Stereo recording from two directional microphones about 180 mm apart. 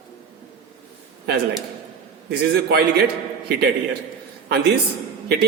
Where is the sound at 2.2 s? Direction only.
60° right (ahead or behind).